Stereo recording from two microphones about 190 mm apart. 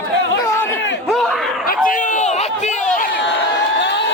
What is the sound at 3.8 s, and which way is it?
Crowd, 70° left (ahead or behind).